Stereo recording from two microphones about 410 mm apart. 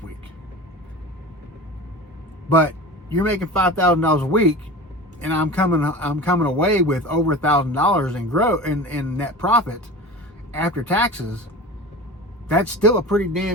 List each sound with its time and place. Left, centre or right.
3.2 s speech: centre
12.8 s speech: centre